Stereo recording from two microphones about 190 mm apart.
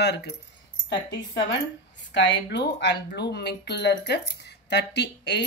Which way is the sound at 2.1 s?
65° left (ahead or behind).